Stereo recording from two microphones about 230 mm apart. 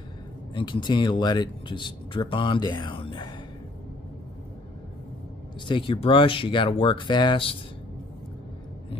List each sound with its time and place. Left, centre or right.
0.6 s speech: left
5.7 s speech: left